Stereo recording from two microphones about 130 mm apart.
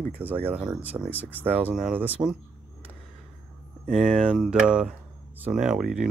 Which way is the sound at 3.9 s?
Centre (ahead or behind).